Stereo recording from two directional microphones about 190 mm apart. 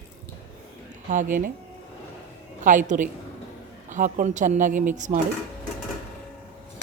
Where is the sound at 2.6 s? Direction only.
40° right (ahead or behind).